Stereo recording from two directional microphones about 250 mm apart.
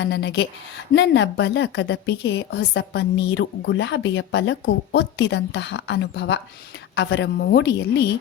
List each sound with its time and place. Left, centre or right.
0.0 s a woman's voice: left